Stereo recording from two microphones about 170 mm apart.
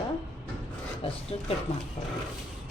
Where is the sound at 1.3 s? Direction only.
35° left (ahead or behind).